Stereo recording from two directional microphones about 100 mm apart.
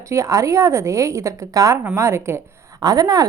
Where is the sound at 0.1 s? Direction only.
30° right (ahead or behind).